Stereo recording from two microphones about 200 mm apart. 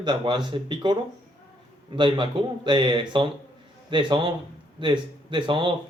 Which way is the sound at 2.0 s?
25° right (ahead or behind).